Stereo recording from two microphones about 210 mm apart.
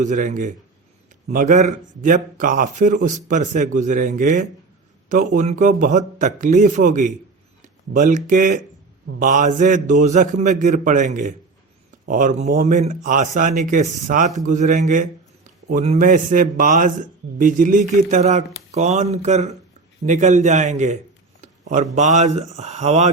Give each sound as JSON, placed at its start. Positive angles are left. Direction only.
{"t": 0.0, "sound": "speech", "side_deg": -35}